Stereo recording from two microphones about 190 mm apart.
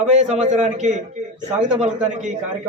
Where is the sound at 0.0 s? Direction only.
40° right (ahead or behind).